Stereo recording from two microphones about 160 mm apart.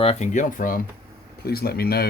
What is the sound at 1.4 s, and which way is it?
Speech, 75° left (ahead or behind).